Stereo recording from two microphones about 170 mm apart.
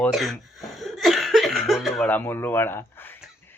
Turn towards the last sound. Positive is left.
turn(degrees=10)  # may be behind; listen again after turning